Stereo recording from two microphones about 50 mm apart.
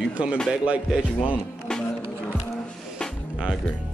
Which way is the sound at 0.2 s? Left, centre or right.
Right.